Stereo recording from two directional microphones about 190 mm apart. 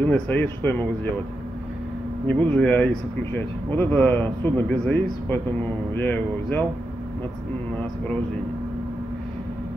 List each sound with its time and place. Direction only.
0.0 s speech: 10° left (ahead or behind)
2.2 s speech: 5° left (ahead or behind)